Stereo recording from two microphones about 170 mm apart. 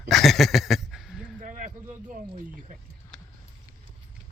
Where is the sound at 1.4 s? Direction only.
50° right (ahead or behind).